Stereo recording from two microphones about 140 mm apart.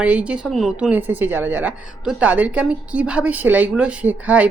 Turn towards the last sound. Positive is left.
turn(degrees=-10)  # may be behind; listen again after turning